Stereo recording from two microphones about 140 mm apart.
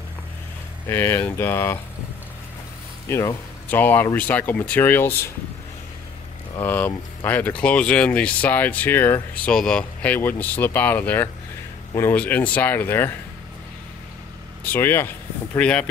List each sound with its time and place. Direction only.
0.8 s speech: 15° left (ahead or behind)
3.1 s speech: 20° left (ahead or behind)
6.6 s speech: 15° left (ahead or behind)
14.6 s speech: 15° left (ahead or behind)